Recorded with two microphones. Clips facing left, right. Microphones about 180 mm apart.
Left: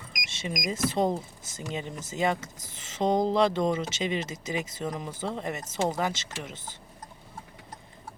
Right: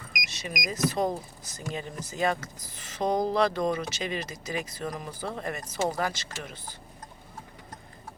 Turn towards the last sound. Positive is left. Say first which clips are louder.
# left 1 dB
turn(degrees=25)  # may be behind; listen again after turning